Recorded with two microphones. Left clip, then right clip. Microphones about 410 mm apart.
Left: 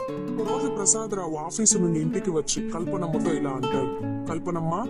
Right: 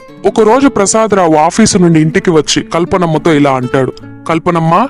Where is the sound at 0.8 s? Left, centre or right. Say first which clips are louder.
Right 19 dB; left.